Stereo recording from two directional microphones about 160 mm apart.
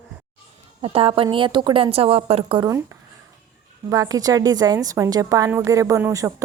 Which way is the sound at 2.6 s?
20° right (ahead or behind).